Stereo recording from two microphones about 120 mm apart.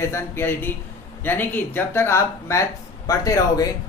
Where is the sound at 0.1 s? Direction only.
20° left (ahead or behind).